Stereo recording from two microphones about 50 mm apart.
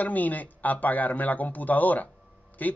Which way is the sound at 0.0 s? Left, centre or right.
Left.